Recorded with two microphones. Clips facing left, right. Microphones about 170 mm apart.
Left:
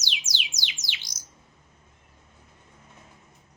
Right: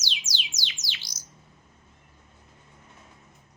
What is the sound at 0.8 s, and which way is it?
Bird, 20° left (ahead or behind).